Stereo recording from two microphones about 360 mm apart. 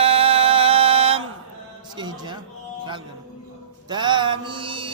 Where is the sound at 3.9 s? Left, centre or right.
Centre.